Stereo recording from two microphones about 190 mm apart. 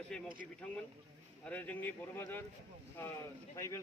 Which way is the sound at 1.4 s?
10° left (ahead or behind).